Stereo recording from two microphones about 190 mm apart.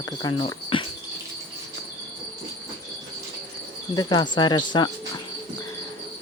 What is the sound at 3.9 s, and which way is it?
Cricket, 20° left (ahead or behind).